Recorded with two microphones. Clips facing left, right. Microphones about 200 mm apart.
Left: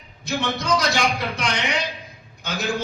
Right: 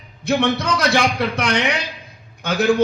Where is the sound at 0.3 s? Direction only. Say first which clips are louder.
Right 5 dB; 60° right (ahead or behind).